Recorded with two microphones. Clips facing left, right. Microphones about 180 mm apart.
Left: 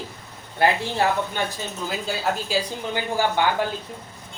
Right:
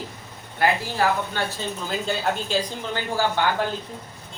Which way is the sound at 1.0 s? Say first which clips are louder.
Even; 25° left (ahead or behind).